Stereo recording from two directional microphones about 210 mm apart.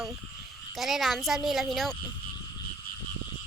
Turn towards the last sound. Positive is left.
turn(degrees=0)  # may be behind; listen again after turning